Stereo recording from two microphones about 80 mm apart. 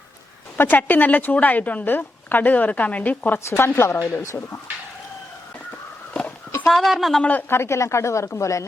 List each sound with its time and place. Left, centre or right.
0.5 s a woman's voice: left
3.4 s a woman's voice: left
6.7 s a woman's voice: centre
7.2 s a woman's voice: centre
7.5 s a woman's voice: left